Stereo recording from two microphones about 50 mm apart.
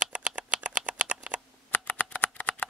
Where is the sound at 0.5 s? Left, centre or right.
Right.